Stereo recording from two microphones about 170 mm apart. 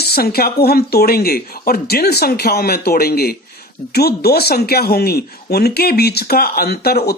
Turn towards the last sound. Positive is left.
turn(degrees=70)  # may be behind; listen again after turning